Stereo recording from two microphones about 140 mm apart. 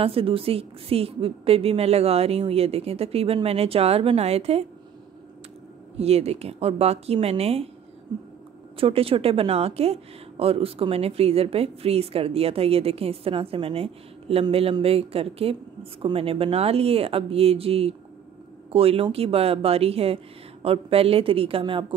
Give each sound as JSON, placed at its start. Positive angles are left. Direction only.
{"t": 0.0, "sound": "speech", "side_deg": -40}
{"t": 5.9, "sound": "speech", "side_deg": -50}
{"t": 8.7, "sound": "a woman's voice", "side_deg": -40}